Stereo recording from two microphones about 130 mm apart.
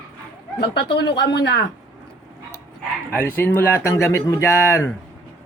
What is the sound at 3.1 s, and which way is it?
Speech, 15° left (ahead or behind).